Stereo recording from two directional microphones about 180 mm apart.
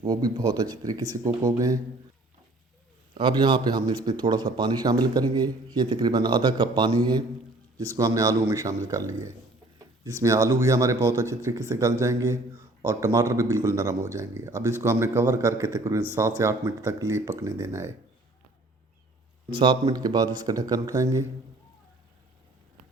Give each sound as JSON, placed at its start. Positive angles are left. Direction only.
{"t": 0.0, "sound": "speech", "side_deg": -20}
{"t": 3.2, "sound": "a man's voice", "side_deg": -25}
{"t": 19.5, "sound": "speech", "side_deg": -30}